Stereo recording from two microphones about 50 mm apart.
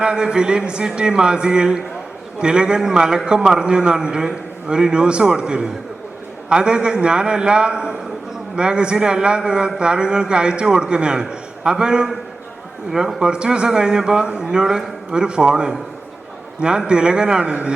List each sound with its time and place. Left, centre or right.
0.0 s a man's voice: centre